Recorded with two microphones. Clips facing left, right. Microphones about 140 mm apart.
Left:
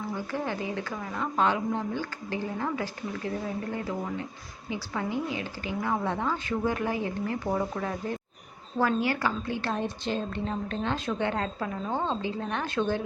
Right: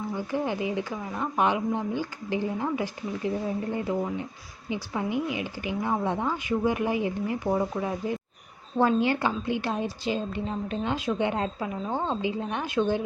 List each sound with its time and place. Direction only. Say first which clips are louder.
0.1 s speech: right 4 dB; 15° right (ahead or behind)